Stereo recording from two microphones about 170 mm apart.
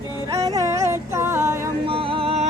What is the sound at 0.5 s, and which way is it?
Music, 15° right (ahead or behind).